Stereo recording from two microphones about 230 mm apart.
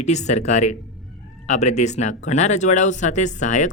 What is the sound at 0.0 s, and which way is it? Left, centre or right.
Speech, left.